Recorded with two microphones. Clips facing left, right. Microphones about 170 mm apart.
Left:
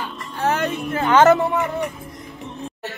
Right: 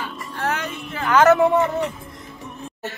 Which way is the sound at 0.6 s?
45° left (ahead or behind).